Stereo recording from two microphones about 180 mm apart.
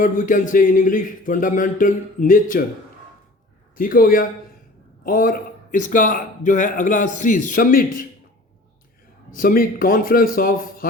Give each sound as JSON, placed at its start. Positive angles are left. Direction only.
{"t": 0.0, "sound": "a man's voice", "side_deg": 50}
{"t": 3.8, "sound": "a man's voice", "side_deg": 50}
{"t": 9.3, "sound": "a man's voice", "side_deg": 50}